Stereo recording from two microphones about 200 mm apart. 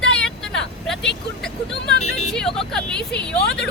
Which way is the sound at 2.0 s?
35° left (ahead or behind).